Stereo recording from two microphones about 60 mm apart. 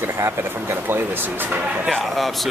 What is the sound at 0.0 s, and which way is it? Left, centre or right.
Speech, right.